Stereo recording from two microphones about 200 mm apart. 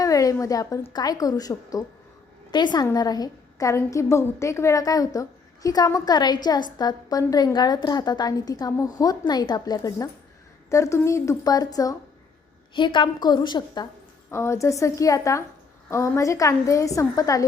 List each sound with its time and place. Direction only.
0.0 s a woman's voice: 15° left (ahead or behind)